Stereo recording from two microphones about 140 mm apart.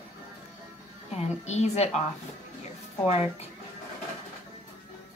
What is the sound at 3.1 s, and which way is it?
Speech, 50° left (ahead or behind).